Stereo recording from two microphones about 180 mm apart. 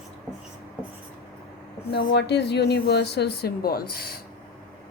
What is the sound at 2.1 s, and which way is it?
Speech, 70° left (ahead or behind).